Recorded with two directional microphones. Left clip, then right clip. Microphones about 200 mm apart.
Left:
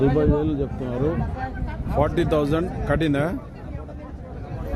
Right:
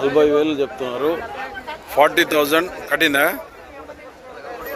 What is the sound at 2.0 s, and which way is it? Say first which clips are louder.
Speech: right 7 dB; centre (ahead or behind).